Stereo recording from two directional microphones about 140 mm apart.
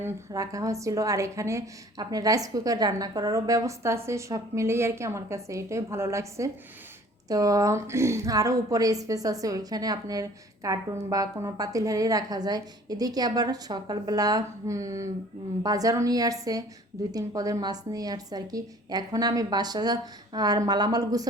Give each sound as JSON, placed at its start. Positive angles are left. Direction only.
{"t": 0.0, "sound": "a woman's voice", "side_deg": -25}